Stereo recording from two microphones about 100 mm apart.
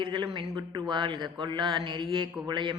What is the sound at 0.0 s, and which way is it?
A man's voice, 50° right (ahead or behind).